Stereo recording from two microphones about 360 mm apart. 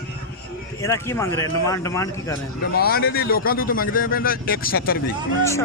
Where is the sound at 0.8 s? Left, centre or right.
Centre.